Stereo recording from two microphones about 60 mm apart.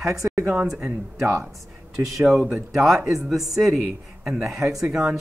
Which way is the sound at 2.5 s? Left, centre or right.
Centre.